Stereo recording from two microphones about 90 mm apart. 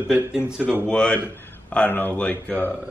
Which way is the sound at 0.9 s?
10° left (ahead or behind).